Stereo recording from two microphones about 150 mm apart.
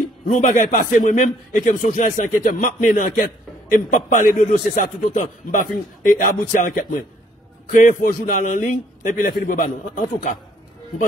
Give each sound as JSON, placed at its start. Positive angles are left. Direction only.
{"t": 0.3, "sound": "a man's voice", "side_deg": 55}
{"t": 3.9, "sound": "a man's voice", "side_deg": 60}